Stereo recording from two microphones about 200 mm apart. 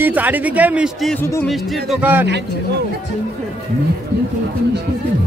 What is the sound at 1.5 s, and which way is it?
Speech, centre (ahead or behind).